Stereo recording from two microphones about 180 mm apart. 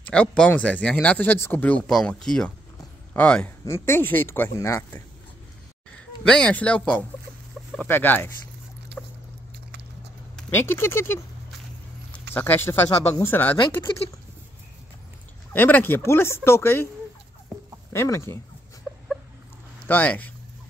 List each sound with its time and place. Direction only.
0.0 s speech: 5° left (ahead or behind)
6.2 s speech: 5° left (ahead or behind)
8.9 s boat: 70° right (ahead or behind)
10.3 s speech: 10° left (ahead or behind)
12.4 s speech: 10° left (ahead or behind)
15.5 s speech: 10° left (ahead or behind)
17.9 s speech: 15° left (ahead or behind)
18.9 s a sound: centre (ahead or behind)
19.9 s speech: 10° left (ahead or behind)